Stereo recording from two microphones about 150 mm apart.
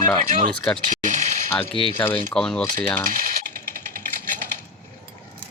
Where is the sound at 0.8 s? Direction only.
55° right (ahead or behind).